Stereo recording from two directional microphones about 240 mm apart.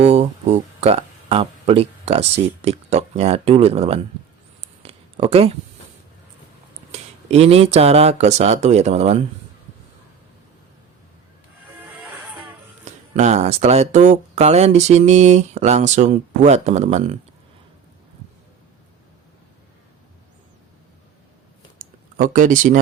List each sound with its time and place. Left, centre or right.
0.0 s speech: right
4.6 s a sound: right
6.9 s speech: right
11.8 s music: centre
12.8 s speech: right
21.8 s a sound: right